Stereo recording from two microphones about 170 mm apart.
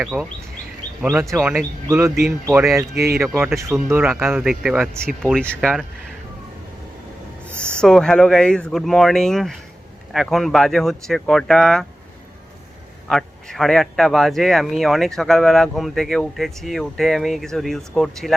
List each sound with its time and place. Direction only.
0.0 s speech: 5° right (ahead or behind)
1.0 s speech: 15° right (ahead or behind)
1.4 s speech: centre (ahead or behind)
1.9 s speech: 15° right (ahead or behind)
2.1 s speech: centre (ahead or behind)
2.9 s speech: 70° right (ahead or behind)
3.2 s speech: 15° right (ahead or behind)
4.4 s speech: centre (ahead or behind)
7.8 s speech: 5° left (ahead or behind)
13.1 s speech: centre (ahead or behind)